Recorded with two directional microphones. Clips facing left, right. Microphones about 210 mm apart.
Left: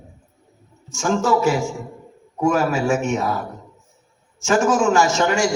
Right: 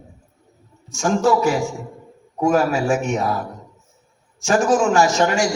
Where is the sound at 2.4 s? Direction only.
35° right (ahead or behind).